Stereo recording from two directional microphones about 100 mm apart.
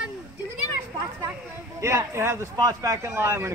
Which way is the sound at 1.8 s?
30° right (ahead or behind).